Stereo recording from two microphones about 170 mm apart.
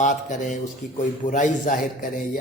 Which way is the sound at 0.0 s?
45° left (ahead or behind).